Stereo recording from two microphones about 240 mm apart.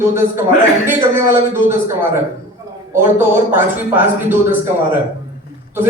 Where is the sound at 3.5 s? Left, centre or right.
Centre.